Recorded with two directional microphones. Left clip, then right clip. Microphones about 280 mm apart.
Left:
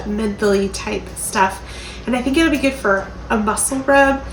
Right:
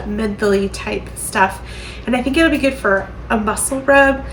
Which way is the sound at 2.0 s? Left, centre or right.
Centre.